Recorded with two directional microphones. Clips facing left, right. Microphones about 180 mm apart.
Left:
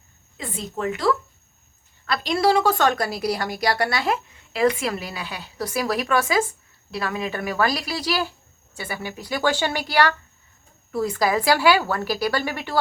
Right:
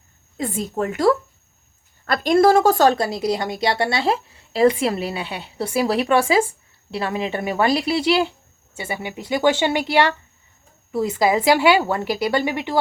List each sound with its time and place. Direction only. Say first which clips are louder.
0.3 s a woman's voice: right 7 dB; 45° right (ahead or behind); by 12.8 s 20° right (ahead or behind)